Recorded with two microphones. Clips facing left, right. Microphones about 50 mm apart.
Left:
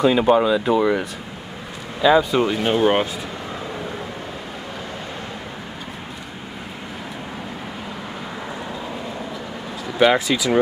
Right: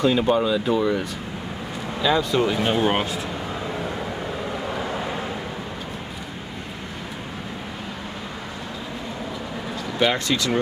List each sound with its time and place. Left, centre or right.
0.0 s speech: centre
9.9 s speech: centre